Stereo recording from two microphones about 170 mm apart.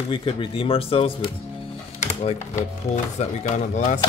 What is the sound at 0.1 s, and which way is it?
Speech, 30° left (ahead or behind).